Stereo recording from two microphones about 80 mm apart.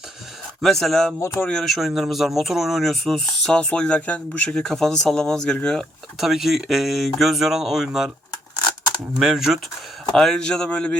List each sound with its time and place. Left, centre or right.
0.6 s speech: centre
1.2 s speech: left
1.5 s speech: centre
6.1 s speech: centre
9.1 s speech: centre
10.2 s speech: centre